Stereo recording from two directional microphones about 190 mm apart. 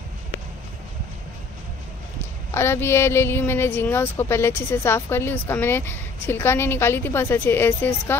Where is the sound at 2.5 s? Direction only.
15° left (ahead or behind).